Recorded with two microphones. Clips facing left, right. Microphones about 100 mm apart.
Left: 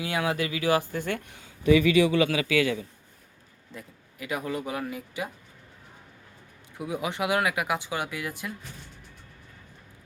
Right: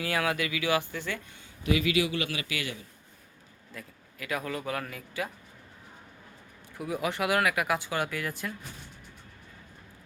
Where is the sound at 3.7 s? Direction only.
20° left (ahead or behind).